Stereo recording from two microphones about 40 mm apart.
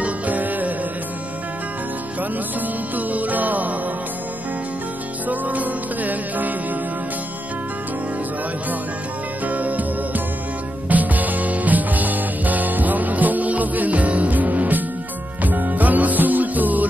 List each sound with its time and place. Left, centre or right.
0.0 s music: right
3.0 s music: right
5.3 s music: right
9.5 s music: right